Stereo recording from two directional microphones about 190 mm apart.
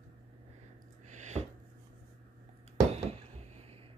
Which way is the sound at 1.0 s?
40° right (ahead or behind).